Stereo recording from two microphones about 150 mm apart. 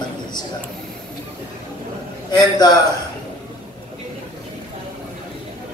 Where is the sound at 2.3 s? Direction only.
30° left (ahead or behind).